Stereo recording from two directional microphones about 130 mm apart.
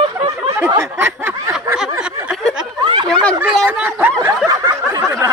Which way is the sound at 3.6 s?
10° right (ahead or behind).